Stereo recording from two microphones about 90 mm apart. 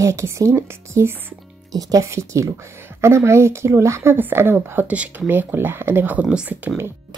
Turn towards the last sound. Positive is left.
turn(degrees=-10)  # may be behind; listen again after turning